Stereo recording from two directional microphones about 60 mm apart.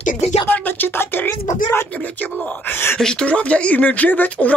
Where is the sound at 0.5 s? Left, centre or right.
Left.